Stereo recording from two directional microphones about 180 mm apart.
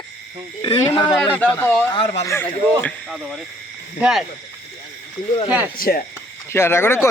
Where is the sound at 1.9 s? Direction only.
30° left (ahead or behind).